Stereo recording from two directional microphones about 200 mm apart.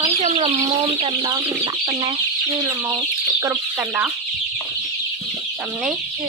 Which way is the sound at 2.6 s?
15° right (ahead or behind).